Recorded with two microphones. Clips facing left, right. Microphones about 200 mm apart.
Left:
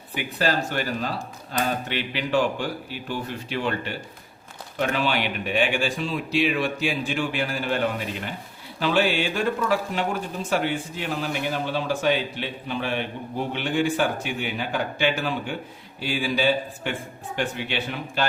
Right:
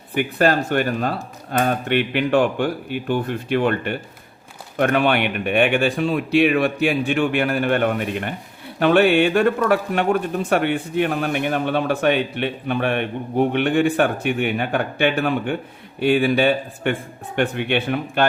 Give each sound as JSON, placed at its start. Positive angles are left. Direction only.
{"t": 0.1, "sound": "speech", "side_deg": -55}